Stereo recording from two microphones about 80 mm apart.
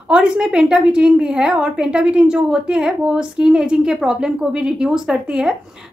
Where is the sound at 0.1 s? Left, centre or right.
Centre.